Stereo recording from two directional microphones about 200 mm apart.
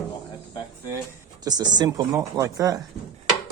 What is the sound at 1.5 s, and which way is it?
Speech, 20° right (ahead or behind).